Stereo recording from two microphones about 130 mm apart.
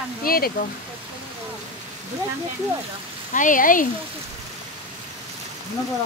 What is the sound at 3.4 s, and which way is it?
Speech, 90° left.